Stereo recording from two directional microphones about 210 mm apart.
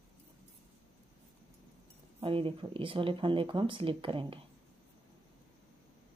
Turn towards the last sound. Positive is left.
turn(degrees=-25)  # may be behind; listen again after turning